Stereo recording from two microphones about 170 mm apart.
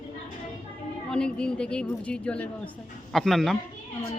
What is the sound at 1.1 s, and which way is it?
Speech, 5° left (ahead or behind).